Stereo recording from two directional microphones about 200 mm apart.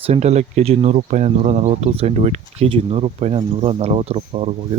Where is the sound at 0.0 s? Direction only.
35° right (ahead or behind).